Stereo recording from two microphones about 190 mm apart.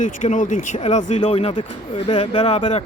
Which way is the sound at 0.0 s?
40° left (ahead or behind).